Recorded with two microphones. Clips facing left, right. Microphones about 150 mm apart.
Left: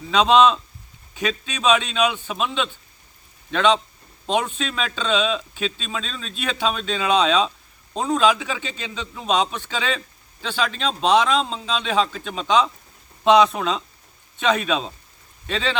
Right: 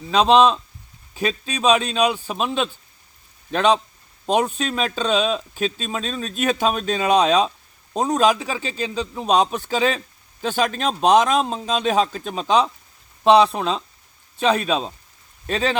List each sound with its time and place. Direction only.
0.1 s a man's voice: 35° right (ahead or behind)